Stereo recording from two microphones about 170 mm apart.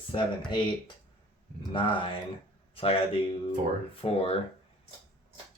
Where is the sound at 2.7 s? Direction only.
35° left (ahead or behind).